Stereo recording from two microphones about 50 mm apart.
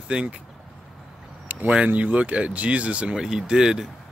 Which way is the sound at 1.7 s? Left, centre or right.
Right.